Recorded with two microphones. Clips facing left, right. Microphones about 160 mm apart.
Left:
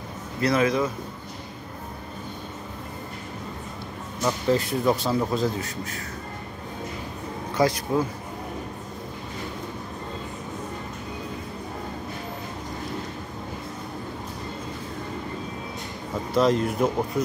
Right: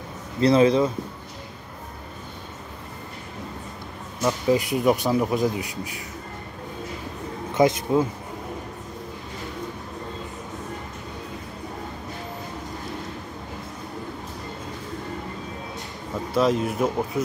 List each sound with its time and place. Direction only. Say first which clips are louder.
0.4 s speech: right 5 dB; 30° right (ahead or behind)
4.2 s speech: right 2 dB; 5° right (ahead or behind)
4.6 s speech: right 2 dB; 15° right (ahead or behind)
7.5 s speech: right 3 dB; 20° right (ahead or behind)
16.3 s speech: even; centre (ahead or behind)